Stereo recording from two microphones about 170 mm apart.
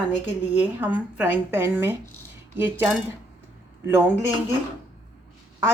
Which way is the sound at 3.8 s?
15° right (ahead or behind).